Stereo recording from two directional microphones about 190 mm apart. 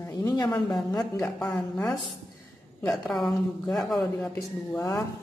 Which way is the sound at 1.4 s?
Centre (ahead or behind).